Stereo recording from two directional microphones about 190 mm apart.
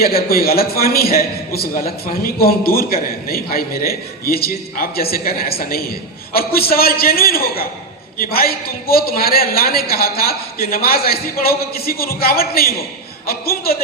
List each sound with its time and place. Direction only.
0.0 s a man's voice: 50° left (ahead or behind)